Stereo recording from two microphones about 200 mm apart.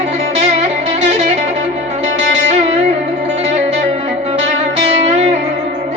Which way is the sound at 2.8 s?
35° right (ahead or behind).